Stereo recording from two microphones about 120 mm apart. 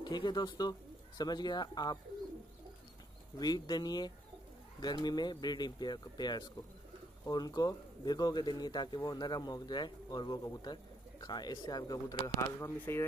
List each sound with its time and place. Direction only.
0.0 s speech: 35° left (ahead or behind)
3.3 s speech: 35° left (ahead or behind)